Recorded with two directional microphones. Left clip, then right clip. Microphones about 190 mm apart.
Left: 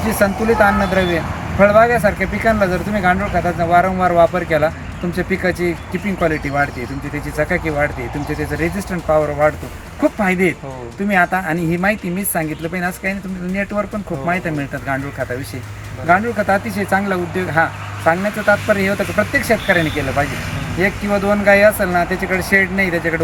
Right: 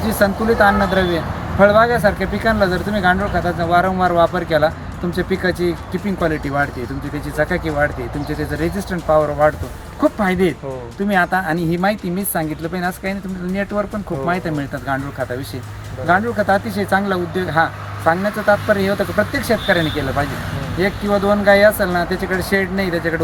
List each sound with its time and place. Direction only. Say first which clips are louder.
0.1 s speech: left 1 dB; 15° left (ahead or behind)
8.9 s speech: right 1 dB; 15° left (ahead or behind)